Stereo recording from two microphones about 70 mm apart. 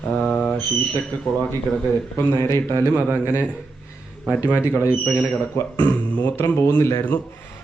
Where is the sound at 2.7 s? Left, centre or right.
Left.